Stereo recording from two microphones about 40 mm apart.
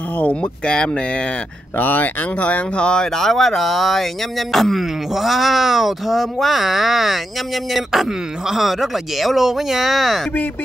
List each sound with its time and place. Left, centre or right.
0.2 s speech: left
1.8 s speech: left
2.8 s speech: left
3.1 s speech: centre